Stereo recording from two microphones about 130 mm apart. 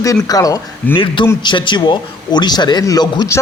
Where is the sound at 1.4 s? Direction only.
40° left (ahead or behind).